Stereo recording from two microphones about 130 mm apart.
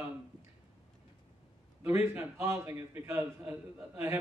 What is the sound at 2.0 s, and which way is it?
A man's voice, 20° right (ahead or behind).